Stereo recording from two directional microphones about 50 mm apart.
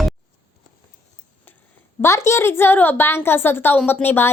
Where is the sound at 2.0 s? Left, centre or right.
Left.